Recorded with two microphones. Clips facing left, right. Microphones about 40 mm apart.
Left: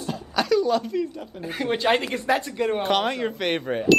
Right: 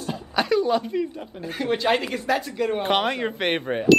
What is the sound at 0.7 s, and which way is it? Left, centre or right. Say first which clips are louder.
Speech: even; right.